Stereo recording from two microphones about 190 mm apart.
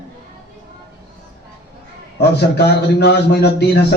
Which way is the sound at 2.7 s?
60° left (ahead or behind).